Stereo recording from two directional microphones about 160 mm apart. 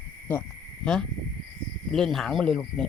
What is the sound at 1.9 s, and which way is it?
Speech, centre (ahead or behind).